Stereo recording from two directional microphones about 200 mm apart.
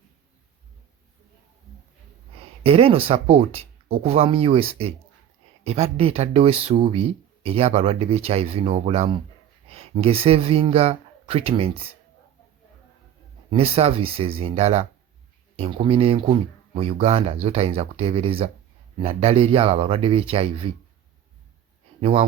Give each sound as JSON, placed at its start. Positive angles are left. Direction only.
{"t": 2.6, "sound": "speech", "side_deg": -30}
{"t": 13.5, "sound": "speech", "side_deg": -30}
{"t": 22.0, "sound": "speech", "side_deg": -30}